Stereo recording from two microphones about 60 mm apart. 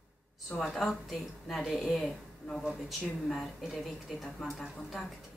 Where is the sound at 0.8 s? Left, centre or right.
Centre.